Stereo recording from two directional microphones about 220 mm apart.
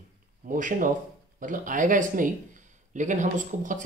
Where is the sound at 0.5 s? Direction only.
35° right (ahead or behind).